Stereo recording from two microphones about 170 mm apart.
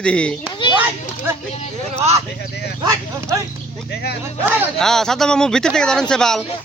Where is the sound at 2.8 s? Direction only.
20° right (ahead or behind).